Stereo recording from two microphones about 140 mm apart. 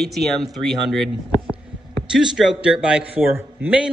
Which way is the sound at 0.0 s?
Centre (ahead or behind).